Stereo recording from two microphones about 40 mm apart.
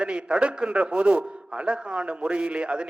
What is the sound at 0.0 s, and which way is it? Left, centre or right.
A man's voice, right.